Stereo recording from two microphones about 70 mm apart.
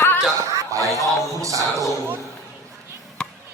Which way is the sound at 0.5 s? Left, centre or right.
Right.